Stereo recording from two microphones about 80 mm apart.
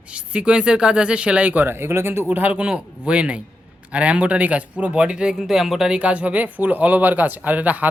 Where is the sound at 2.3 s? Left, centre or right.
Centre.